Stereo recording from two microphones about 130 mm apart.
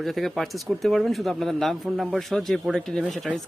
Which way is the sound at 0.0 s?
Centre (ahead or behind).